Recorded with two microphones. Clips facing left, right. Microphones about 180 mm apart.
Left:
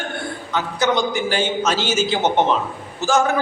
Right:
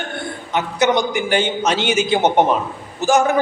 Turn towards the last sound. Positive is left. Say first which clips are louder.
# right 3 dB
turn(degrees=-15)  # may be behind; listen again after turning